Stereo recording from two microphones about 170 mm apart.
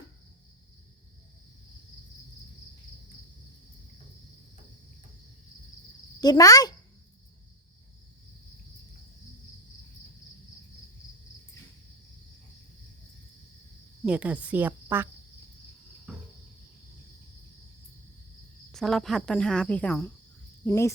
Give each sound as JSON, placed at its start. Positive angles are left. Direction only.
{"t": 6.1, "sound": "speech", "side_deg": 20}
{"t": 14.0, "sound": "a woman's voice", "side_deg": -5}
{"t": 18.7, "sound": "speech", "side_deg": 0}